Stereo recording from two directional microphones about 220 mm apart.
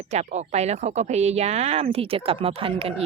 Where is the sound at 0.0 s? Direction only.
30° right (ahead or behind).